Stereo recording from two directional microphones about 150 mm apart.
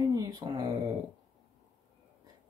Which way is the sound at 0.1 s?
25° right (ahead or behind).